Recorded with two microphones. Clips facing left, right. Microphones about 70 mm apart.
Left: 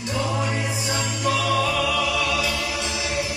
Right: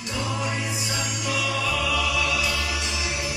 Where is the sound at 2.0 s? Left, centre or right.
Left.